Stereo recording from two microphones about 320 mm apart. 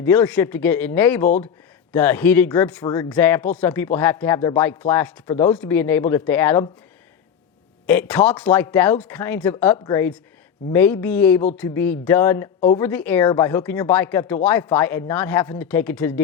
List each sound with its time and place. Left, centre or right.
0.0 s speech: centre
7.9 s speech: centre
12.5 s a sound: centre
12.8 s speech: centre